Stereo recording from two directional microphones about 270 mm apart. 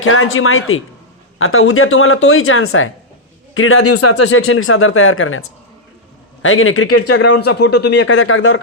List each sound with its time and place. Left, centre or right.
0.0 s speech: left
7.1 s speech: left